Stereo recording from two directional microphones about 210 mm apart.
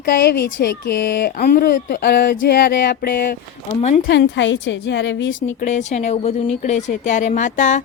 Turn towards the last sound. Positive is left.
turn(degrees=35)  # may be behind; listen again after turning